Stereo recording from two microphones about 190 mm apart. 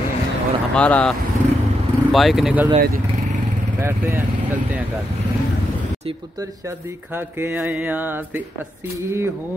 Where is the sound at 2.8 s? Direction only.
50° right (ahead or behind).